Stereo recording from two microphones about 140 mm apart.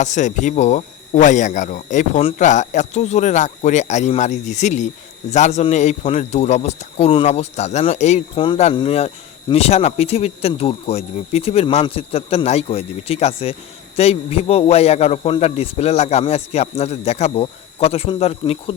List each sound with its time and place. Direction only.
0.0 s speech: 60° left (ahead or behind)
8.7 s speech: 40° left (ahead or behind)